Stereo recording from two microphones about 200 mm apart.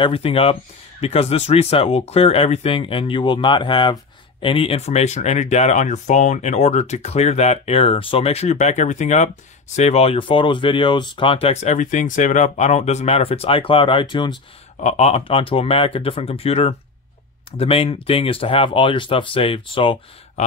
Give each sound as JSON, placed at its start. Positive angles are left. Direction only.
{"t": 0.0, "sound": "speech", "side_deg": 30}
{"t": 14.8, "sound": "speech", "side_deg": 35}